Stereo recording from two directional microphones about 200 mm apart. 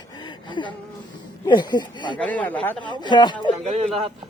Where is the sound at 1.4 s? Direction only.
20° left (ahead or behind).